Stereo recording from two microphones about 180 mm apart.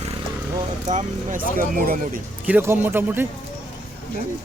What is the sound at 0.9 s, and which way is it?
Speech, 45° right (ahead or behind).